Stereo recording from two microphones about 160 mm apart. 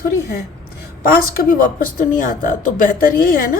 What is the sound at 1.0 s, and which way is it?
Speech, 65° left (ahead or behind).